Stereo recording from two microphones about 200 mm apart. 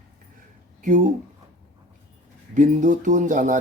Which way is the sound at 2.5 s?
40° right (ahead or behind).